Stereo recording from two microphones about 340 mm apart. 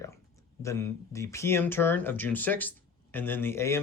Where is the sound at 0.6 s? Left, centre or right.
Centre.